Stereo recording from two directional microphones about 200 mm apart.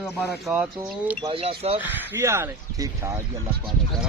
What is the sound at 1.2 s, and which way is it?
Speech, 25° right (ahead or behind).